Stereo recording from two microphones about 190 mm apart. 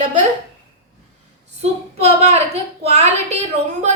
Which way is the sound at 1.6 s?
35° right (ahead or behind).